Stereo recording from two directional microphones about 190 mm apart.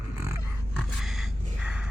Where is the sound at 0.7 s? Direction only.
Centre (ahead or behind).